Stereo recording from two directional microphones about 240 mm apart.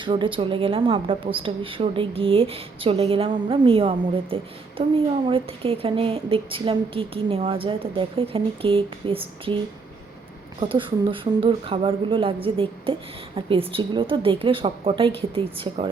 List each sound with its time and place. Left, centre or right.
0.0 s speech: centre
10.6 s speech: right